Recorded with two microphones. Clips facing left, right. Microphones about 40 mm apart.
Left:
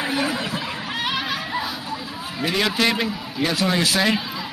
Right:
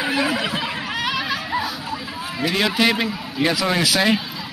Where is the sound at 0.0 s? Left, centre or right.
Right.